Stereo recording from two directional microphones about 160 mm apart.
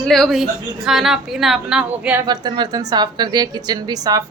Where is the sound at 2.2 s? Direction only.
25° right (ahead or behind).